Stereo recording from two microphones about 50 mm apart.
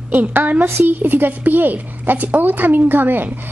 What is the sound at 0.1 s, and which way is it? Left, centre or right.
Speech, right.